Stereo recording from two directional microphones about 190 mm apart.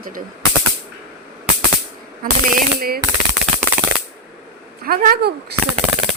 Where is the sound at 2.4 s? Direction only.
50° right (ahead or behind).